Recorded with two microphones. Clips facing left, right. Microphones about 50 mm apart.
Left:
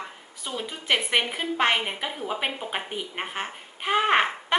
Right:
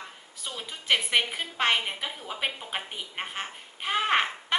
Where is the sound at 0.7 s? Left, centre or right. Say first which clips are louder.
Left 1 dB; centre.